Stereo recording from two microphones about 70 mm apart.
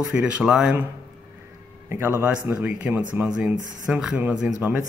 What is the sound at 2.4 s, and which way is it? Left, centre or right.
Speech, right.